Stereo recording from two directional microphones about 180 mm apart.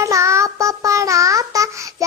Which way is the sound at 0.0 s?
15° right (ahead or behind).